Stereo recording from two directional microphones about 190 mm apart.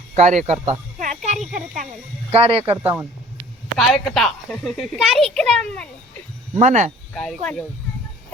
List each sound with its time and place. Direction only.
0.2 s speech: 40° right (ahead or behind)
0.7 s a sound: 40° right (ahead or behind)
1.5 s speech: 45° right (ahead or behind)
2.3 s speech: 30° right (ahead or behind)
2.8 s speech: 10° right (ahead or behind)
3.8 s a child's voice: centre (ahead or behind)
6.6 s speech: 40° right (ahead or behind)
7.1 s speech: 5° left (ahead or behind)